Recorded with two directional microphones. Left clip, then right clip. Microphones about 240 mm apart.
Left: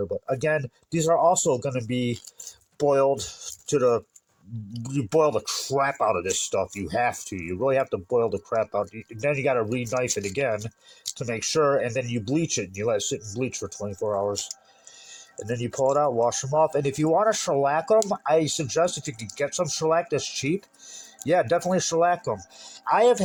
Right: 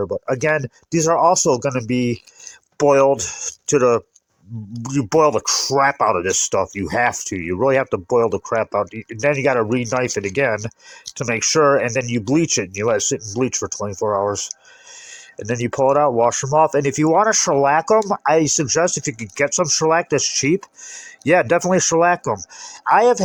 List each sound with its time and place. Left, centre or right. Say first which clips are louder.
0.0 s speech: right 6 dB; right
15.4 s speech: right 7 dB; right